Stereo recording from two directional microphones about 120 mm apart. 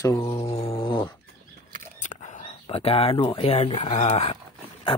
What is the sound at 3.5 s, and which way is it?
Speech, 55° left (ahead or behind).